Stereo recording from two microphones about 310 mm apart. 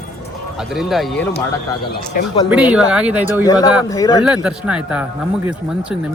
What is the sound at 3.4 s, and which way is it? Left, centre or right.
Speech, centre.